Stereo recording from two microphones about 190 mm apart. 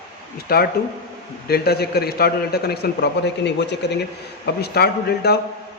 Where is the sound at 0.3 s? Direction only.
55° left (ahead or behind).